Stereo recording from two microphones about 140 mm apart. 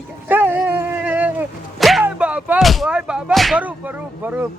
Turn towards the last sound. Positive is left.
turn(degrees=-15)  # may be behind; listen again after turning